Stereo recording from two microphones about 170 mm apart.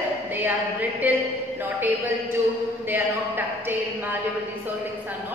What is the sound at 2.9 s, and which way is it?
Speech, 10° right (ahead or behind).